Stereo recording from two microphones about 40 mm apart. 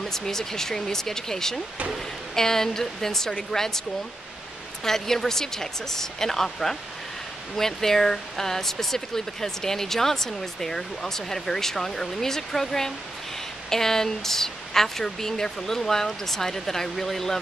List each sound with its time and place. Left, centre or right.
0.0 s speech: centre
4.8 s speech: centre